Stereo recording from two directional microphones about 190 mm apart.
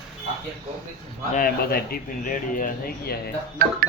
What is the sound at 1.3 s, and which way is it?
Speech, 50° left (ahead or behind).